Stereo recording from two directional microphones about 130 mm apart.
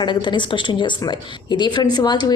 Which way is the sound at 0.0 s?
35° left (ahead or behind).